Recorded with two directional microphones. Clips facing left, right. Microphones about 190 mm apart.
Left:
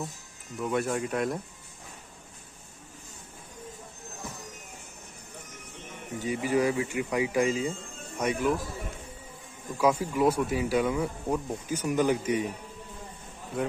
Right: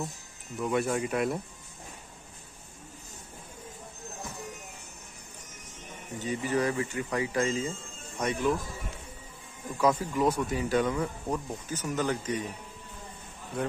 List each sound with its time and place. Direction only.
0.6 s speech: centre (ahead or behind)
6.1 s speech: 10° left (ahead or behind)
9.8 s speech: 10° left (ahead or behind)
13.5 s speech: 5° left (ahead or behind)